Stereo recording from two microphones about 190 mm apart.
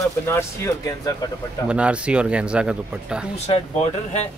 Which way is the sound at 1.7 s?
5° right (ahead or behind).